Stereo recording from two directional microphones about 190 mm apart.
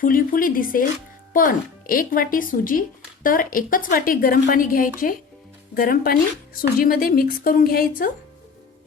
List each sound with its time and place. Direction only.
0.0 s speech: 45° left (ahead or behind)